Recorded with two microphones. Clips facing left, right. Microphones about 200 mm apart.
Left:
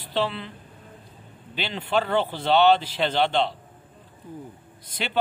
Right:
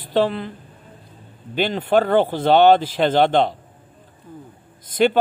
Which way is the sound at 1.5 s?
45° right (ahead or behind).